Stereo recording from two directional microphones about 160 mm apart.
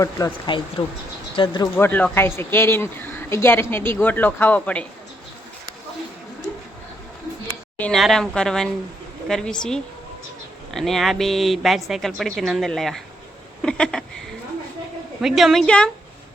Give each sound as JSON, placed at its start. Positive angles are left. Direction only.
{"t": 0.5, "sound": "speech", "side_deg": 30}
{"t": 1.7, "sound": "speech", "side_deg": 10}
{"t": 7.8, "sound": "a woman's voice", "side_deg": 5}
{"t": 13.6, "sound": "a sound", "side_deg": 5}
{"t": 15.2, "sound": "a woman's voice", "side_deg": 0}